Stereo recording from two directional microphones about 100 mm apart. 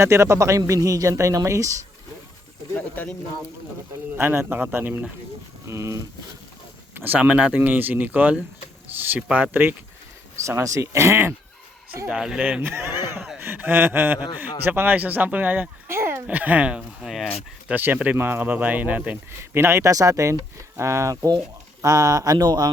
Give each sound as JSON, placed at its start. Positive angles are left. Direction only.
{"t": 0.0, "sound": "speech", "side_deg": -30}
{"t": 2.7, "sound": "speech", "side_deg": 15}
{"t": 4.2, "sound": "a man's voice", "side_deg": -25}
{"t": 5.6, "sound": "speech", "side_deg": -30}
{"t": 6.9, "sound": "a man's voice", "side_deg": -15}
{"t": 10.4, "sound": "a man's voice", "side_deg": -30}
{"t": 12.0, "sound": "a man's voice", "side_deg": -5}
{"t": 17.7, "sound": "a man's voice", "side_deg": -20}